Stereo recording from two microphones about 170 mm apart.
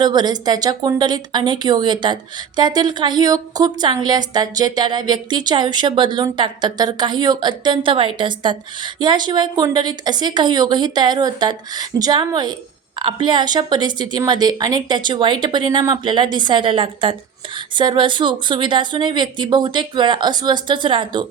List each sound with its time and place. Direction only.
0.0 s a woman's voice: 25° right (ahead or behind)